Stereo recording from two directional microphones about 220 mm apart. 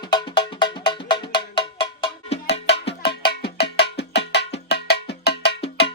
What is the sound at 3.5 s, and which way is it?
Music, 50° left (ahead or behind).